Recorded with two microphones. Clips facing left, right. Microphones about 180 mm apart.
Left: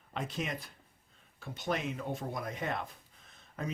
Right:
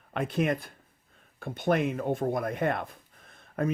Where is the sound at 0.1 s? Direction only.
60° right (ahead or behind).